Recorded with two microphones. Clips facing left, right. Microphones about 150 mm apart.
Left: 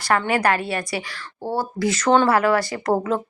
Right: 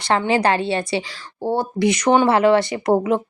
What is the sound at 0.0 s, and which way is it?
A woman's voice, 25° right (ahead or behind).